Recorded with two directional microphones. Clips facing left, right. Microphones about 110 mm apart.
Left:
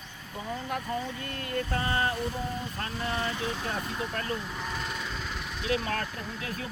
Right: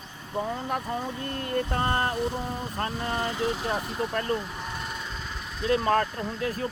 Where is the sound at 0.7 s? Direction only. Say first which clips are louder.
Right 3 dB; 30° right (ahead or behind).